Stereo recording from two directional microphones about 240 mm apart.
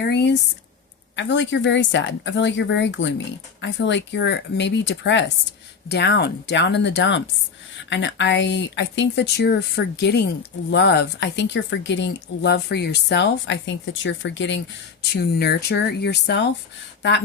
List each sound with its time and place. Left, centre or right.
0.0 s speech: left